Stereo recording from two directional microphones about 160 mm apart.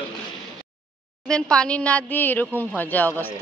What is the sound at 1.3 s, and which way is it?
Speech, 5° left (ahead or behind).